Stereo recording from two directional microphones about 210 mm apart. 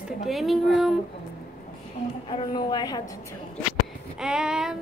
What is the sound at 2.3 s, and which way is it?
Speech, 20° left (ahead or behind).